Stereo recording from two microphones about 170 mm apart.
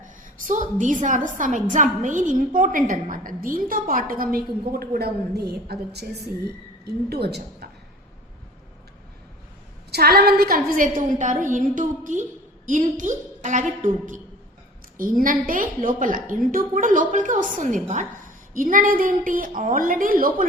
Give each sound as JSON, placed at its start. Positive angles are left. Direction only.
{"t": 0.0, "sound": "a sound", "side_deg": -50}
{"t": 1.0, "sound": "a woman's voice", "side_deg": -50}
{"t": 9.9, "sound": "a woman's voice", "side_deg": -65}